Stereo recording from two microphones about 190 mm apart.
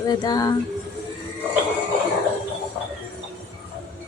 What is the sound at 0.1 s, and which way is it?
Speech, 20° left (ahead or behind).